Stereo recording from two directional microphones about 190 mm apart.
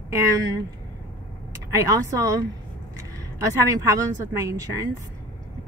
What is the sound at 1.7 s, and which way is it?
Speech, 15° right (ahead or behind).